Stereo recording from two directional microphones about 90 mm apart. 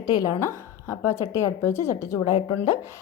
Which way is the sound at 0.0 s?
45° left (ahead or behind).